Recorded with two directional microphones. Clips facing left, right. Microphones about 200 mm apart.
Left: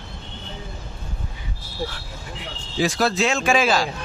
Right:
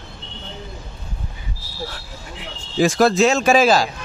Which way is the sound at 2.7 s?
50° right (ahead or behind).